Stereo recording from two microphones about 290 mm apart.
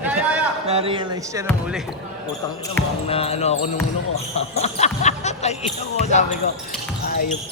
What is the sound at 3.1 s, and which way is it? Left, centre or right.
Speech, centre.